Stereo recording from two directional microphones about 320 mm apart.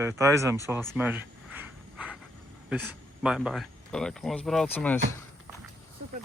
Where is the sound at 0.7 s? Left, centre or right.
Centre.